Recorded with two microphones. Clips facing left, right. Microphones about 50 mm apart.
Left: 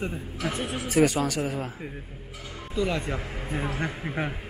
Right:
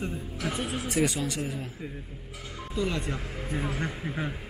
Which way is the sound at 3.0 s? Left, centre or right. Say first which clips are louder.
Left 2 dB; centre.